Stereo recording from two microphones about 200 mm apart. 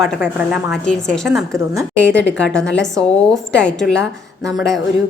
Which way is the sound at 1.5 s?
15° right (ahead or behind).